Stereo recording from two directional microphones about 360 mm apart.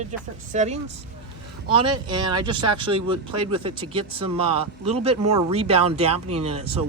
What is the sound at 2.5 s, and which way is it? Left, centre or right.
Speech, right.